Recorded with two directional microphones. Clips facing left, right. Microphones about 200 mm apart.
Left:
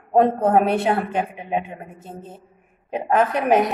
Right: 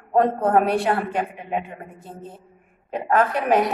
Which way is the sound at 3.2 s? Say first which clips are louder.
Left 2 dB; 20° left (ahead or behind).